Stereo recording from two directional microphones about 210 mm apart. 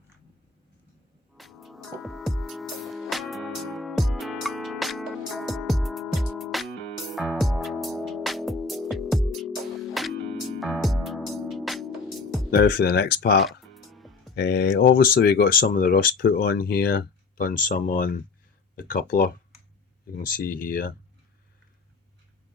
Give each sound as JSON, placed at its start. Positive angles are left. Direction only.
{"t": 1.4, "sound": "music", "side_deg": 0}
{"t": 12.5, "sound": "speech", "side_deg": 50}
{"t": 13.4, "sound": "music", "side_deg": 0}
{"t": 14.3, "sound": "speech", "side_deg": 50}